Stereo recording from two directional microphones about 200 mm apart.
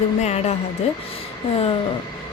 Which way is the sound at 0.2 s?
35° left (ahead or behind).